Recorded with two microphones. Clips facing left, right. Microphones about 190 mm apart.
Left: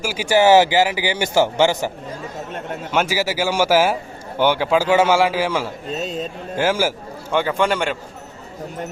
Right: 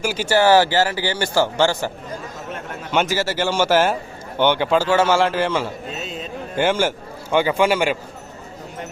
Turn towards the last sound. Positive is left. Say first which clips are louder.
# right 2 dB
turn(degrees=-5)  # may be behind; listen again after turning